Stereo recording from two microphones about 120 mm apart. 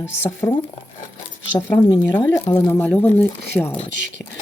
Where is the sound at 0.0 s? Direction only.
20° left (ahead or behind).